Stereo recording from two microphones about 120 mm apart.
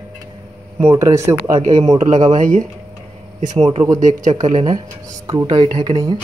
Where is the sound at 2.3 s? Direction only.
90° right.